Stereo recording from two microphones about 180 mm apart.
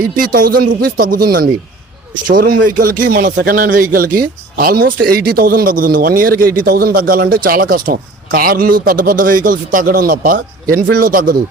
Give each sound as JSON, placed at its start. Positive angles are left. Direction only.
{"t": 0.2, "sound": "speech", "side_deg": -50}